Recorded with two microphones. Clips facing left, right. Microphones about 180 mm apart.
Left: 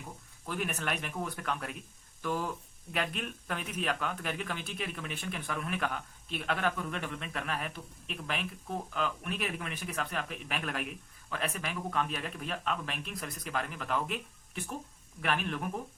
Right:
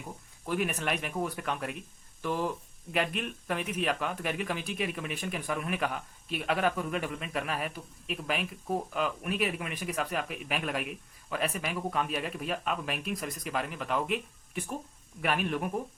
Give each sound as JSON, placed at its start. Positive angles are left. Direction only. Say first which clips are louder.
{"t": 0.4, "sound": "speech", "louder": "right 4 dB", "side_deg": -5}